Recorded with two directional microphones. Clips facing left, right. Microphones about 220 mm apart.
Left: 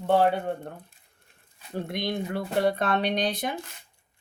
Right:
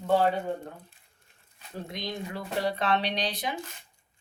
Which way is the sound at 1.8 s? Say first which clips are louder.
Left 5 dB; 60° left (ahead or behind).